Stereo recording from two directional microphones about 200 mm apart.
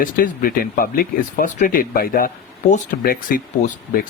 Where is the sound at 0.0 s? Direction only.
45° left (ahead or behind).